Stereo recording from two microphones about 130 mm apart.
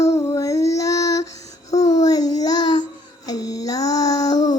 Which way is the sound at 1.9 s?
30° left (ahead or behind).